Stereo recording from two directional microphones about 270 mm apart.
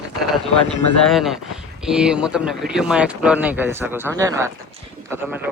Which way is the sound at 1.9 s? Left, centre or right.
Centre.